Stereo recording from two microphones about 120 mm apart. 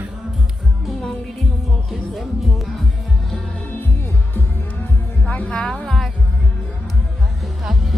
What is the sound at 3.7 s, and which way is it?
Music, 15° left (ahead or behind).